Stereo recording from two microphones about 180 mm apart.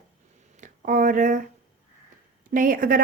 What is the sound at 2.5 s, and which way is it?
Speech, 50° right (ahead or behind).